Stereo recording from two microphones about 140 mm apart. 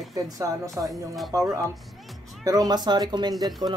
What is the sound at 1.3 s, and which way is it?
Speech, 25° right (ahead or behind).